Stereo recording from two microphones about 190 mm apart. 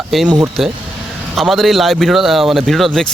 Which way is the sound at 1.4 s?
Centre (ahead or behind).